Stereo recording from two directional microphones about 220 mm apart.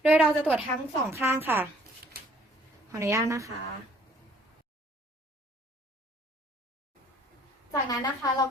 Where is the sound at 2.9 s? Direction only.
15° right (ahead or behind).